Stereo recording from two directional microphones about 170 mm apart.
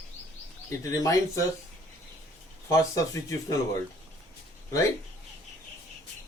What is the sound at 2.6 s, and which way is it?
Speech, 20° left (ahead or behind).